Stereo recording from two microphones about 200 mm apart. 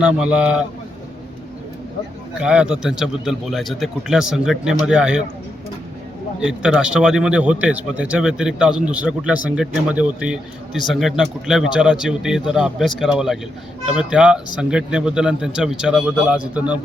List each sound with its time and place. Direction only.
0.0 s speech: 5° right (ahead or behind)
2.4 s speech: 5° right (ahead or behind)
6.4 s speech: 5° right (ahead or behind)